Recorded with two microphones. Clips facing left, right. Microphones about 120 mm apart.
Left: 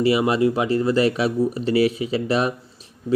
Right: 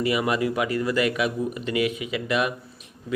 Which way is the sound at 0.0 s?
30° left (ahead or behind).